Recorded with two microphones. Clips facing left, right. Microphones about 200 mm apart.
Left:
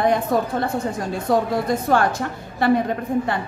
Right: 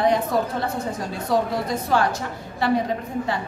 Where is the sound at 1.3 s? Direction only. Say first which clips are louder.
Left 3 dB; 50° left (ahead or behind).